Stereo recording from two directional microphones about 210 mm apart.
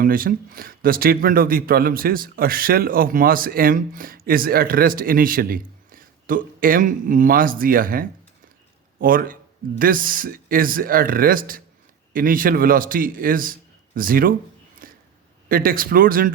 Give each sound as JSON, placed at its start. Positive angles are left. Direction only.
{"t": 0.0, "sound": "a man's voice", "side_deg": -40}
{"t": 14.8, "sound": "a sound", "side_deg": -40}
{"t": 15.4, "sound": "speech", "side_deg": -45}